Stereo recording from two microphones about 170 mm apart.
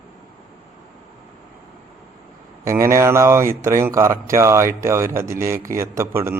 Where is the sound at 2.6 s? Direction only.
15° right (ahead or behind).